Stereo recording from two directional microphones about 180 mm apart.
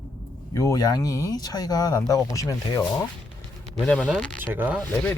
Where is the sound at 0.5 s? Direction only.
20° left (ahead or behind).